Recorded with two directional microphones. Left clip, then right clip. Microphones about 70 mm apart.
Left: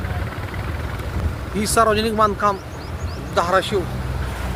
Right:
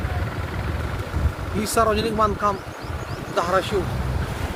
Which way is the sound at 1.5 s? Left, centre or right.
Left.